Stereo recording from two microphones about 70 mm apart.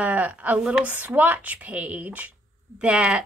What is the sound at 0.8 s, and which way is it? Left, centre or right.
A woman's voice, right.